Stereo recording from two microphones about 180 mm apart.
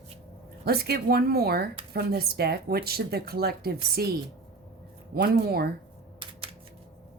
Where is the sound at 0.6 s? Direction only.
60° right (ahead or behind).